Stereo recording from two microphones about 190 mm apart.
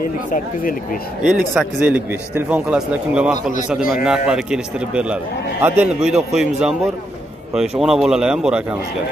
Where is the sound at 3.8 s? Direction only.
50° left (ahead or behind).